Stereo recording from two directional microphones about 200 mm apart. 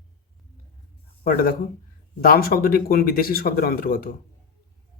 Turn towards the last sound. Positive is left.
turn(degrees=45)  # may be behind; listen again after turning